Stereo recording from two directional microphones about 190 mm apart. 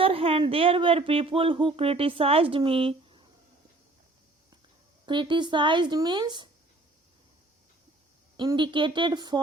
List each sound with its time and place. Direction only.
0.0 s speech: 30° right (ahead or behind)
5.0 s speech: 25° right (ahead or behind)
8.4 s speech: 25° right (ahead or behind)